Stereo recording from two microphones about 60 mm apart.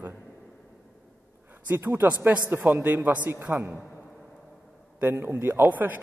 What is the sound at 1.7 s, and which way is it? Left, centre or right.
A man's voice, right.